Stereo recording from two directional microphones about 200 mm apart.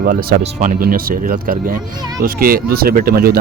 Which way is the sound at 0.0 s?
45° right (ahead or behind).